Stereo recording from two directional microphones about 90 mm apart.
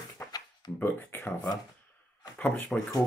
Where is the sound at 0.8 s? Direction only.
25° left (ahead or behind).